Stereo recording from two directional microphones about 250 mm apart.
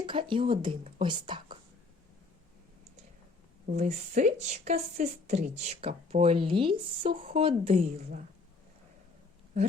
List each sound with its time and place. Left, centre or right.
0.0 s speech: right
3.8 s speech: right